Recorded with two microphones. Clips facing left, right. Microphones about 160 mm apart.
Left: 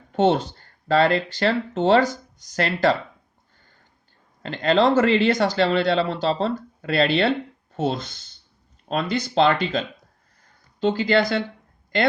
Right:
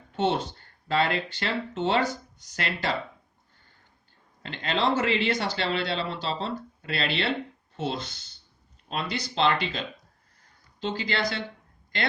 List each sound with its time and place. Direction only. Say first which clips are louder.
0.2 s speech: left 7 dB; 40° left (ahead or behind)
4.4 s speech: left 8 dB; 40° left (ahead or behind)
8.9 s speech: left 7 dB; 45° left (ahead or behind)